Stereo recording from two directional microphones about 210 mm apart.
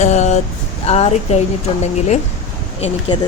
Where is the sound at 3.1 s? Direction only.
20° left (ahead or behind).